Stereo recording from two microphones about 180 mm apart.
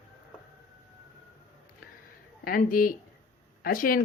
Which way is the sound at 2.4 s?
50° left (ahead or behind).